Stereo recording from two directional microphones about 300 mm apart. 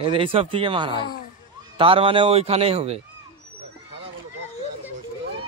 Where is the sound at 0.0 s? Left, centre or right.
Centre.